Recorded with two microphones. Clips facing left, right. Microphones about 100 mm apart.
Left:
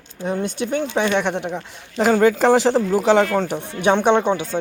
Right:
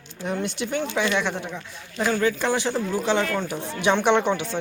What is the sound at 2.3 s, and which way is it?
Speech, 90° left.